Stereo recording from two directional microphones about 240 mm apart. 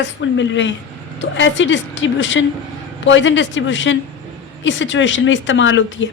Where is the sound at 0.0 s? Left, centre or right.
Left.